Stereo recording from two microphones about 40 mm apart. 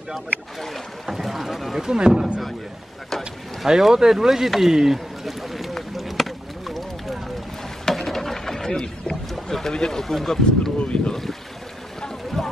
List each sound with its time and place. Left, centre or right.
1.1 s speech: centre
1.8 s speech: centre
3.6 s speech: centre
4.6 s rowboat: centre
7.9 s bird: centre
9.3 s rowboat: centre
9.8 s speech: centre
10.8 s speech: left